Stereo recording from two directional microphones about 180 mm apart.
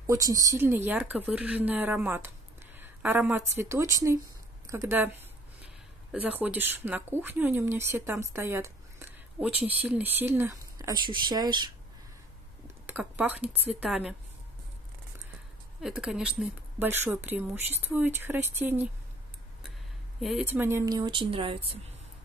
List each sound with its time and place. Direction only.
0.0 s speech: 20° right (ahead or behind)
6.1 s speech: 10° right (ahead or behind); by 11.7 s 25° right (ahead or behind)
12.8 s speech: 10° right (ahead or behind)
15.8 s speech: 5° right (ahead or behind)
20.2 s speech: centre (ahead or behind)
20.4 s speech: 10° right (ahead or behind); by 21.6 s 30° right (ahead or behind)